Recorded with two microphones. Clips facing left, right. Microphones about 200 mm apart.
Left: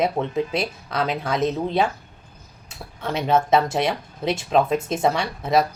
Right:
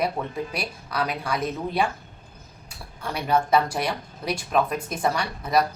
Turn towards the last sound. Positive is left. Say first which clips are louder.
# left 3 dB
turn(degrees=25)  # may be behind; listen again after turning